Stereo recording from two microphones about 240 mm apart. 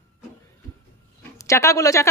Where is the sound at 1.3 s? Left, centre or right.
Centre.